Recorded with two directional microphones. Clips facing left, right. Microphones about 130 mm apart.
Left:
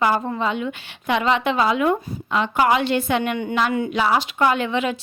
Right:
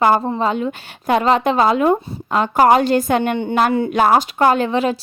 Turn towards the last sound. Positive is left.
turn(degrees=-35)  # may be behind; listen again after turning